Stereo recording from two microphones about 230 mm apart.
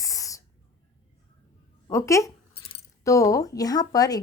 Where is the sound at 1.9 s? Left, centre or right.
Centre.